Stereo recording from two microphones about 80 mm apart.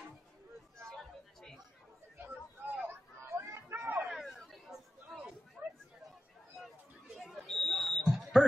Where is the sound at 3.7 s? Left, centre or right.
Right.